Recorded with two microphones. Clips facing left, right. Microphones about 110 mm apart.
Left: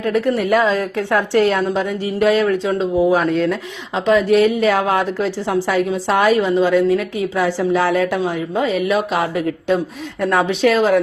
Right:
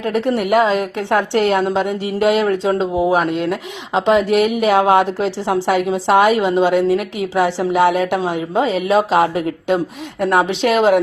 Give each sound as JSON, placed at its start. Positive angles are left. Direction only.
{"t": 0.0, "sound": "speech", "side_deg": -25}